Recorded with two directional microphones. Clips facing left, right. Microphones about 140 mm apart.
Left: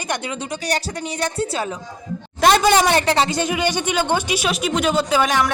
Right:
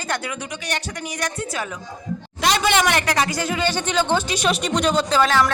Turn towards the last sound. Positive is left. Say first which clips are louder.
# even
turn(degrees=15)  # may be behind; listen again after turning